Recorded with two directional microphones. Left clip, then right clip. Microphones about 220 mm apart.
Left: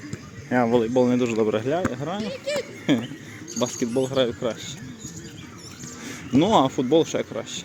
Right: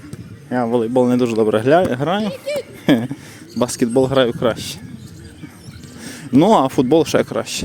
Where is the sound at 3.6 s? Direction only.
30° right (ahead or behind).